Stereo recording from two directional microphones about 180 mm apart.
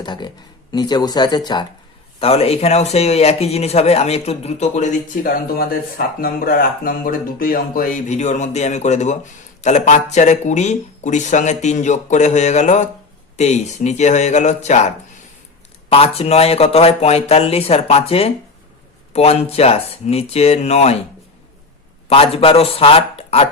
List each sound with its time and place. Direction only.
0.0 s speech: 25° left (ahead or behind)
2.1 s speech: 35° left (ahead or behind)
22.1 s speech: 30° left (ahead or behind)